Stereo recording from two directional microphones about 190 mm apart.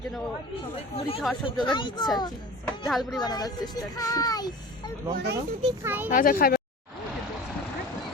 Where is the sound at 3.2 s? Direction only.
20° left (ahead or behind).